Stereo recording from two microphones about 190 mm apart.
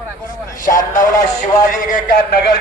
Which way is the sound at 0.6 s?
45° left (ahead or behind).